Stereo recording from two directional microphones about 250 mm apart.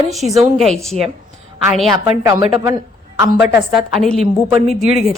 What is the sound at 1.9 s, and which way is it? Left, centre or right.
Speech, centre.